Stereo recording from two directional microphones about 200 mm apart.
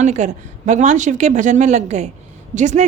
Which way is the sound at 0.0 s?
35° right (ahead or behind).